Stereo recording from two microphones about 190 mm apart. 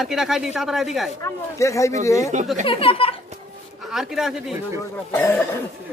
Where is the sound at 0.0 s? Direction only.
Centre (ahead or behind).